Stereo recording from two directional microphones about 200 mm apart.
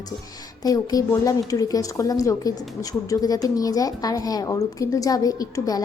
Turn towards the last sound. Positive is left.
turn(degrees=20)  # may be behind; listen again after turning